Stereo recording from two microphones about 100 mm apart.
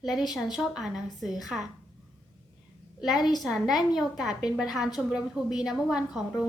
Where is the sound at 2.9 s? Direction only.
5° right (ahead or behind).